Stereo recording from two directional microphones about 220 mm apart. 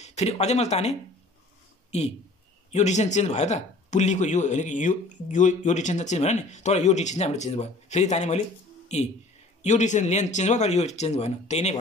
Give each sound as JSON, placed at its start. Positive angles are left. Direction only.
{"t": 0.0, "sound": "speech", "side_deg": 30}